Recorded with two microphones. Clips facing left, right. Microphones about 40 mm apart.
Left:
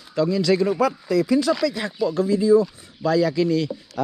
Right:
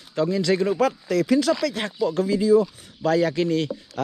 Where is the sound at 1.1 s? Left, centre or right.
Right.